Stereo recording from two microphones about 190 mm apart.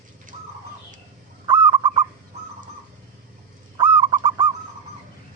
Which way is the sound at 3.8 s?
25° right (ahead or behind).